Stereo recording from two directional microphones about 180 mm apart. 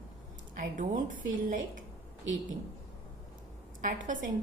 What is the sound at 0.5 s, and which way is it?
A woman's voice, 45° right (ahead or behind).